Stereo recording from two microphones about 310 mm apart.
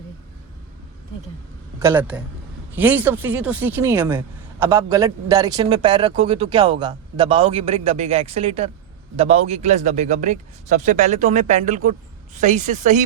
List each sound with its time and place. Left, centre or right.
1.8 s a man's voice: centre; by 13.0 s right